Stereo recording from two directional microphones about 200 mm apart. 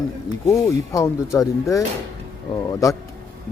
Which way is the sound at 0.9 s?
15° left (ahead or behind).